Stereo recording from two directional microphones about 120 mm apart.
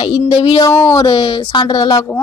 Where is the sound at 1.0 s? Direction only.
40° left (ahead or behind).